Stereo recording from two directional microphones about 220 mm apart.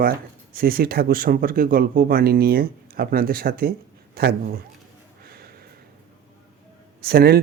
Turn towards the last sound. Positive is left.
turn(degrees=-45)  # may be behind; listen again after turning